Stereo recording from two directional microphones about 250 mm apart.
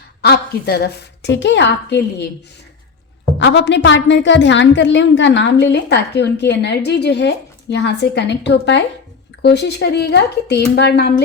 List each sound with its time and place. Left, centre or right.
0.2 s a woman's voice: left
3.3 s a woman's voice: left